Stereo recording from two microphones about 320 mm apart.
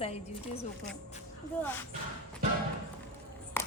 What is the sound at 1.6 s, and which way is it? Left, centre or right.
Speech, centre.